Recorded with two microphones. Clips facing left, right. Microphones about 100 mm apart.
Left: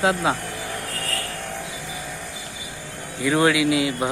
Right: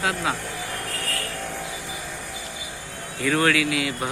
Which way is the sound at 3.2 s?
15° left (ahead or behind).